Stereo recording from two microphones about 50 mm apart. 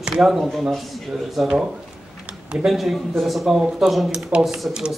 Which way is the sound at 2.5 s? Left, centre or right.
Centre.